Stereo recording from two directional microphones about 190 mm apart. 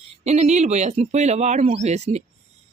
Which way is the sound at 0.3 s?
35° right (ahead or behind).